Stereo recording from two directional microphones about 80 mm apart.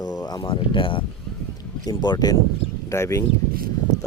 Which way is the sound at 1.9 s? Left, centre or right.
Left.